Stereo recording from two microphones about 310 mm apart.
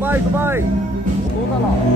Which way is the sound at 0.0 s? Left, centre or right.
Centre.